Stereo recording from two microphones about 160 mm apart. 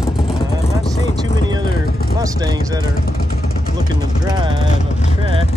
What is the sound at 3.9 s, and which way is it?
Speech, 25° right (ahead or behind).